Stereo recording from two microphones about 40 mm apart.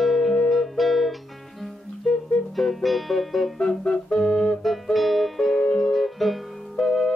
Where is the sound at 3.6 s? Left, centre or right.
Centre.